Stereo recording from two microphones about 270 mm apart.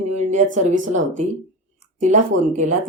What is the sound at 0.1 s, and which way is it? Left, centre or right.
Speech, right.